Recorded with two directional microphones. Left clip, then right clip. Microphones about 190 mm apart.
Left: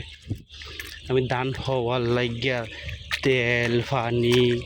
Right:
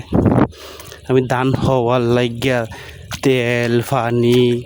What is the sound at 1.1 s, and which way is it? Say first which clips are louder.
Speech: right 9 dB; 50° right (ahead or behind).